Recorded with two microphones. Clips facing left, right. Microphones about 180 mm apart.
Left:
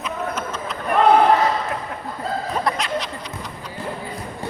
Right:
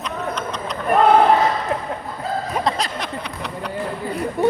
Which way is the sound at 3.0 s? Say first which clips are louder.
Even; 65° right (ahead or behind).